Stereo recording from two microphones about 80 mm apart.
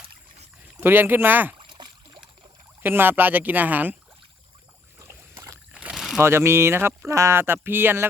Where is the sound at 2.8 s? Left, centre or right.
Right.